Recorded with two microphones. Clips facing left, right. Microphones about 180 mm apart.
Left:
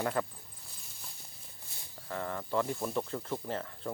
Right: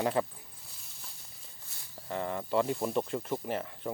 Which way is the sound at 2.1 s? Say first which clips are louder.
Right 3 dB; 20° right (ahead or behind).